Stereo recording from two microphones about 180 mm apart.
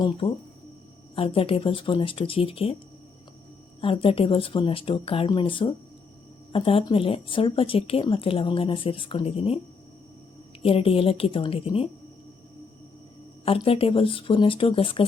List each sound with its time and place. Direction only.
0.2 s speech: 30° left (ahead or behind)
3.8 s speech: 30° left (ahead or behind)
10.6 s speech: 30° left (ahead or behind)
13.4 s speech: 30° left (ahead or behind)